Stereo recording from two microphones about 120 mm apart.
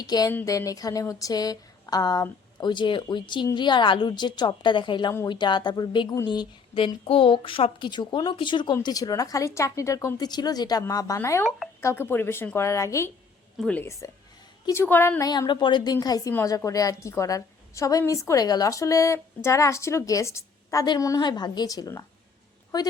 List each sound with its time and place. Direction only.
0.0 s a woman's voice: 35° left (ahead or behind)
13.6 s a woman's voice: 10° left (ahead or behind)
14.0 s a woman's voice: 25° left (ahead or behind)
15.2 s a woman's voice: 35° left (ahead or behind)
16.3 s a woman's voice: 20° left (ahead or behind)